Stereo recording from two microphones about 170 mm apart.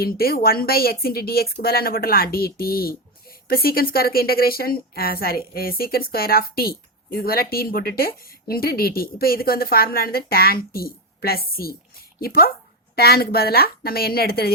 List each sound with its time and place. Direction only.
0.0 s speech: 60° left (ahead or behind)